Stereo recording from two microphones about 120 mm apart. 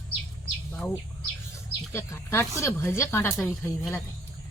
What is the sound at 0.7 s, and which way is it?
Bird, 10° left (ahead or behind).